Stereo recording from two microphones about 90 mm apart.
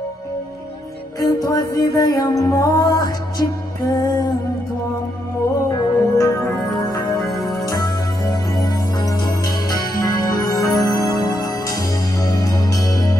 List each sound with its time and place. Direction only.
1.2 s music: 45° left (ahead or behind)
5.7 s music: 40° left (ahead or behind)
7.2 s music: centre (ahead or behind)
7.6 s music: 45° left (ahead or behind)